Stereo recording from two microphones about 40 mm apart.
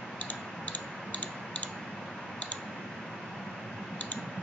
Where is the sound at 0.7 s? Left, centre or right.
Left.